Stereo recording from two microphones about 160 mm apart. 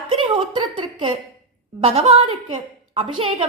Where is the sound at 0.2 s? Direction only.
30° right (ahead or behind).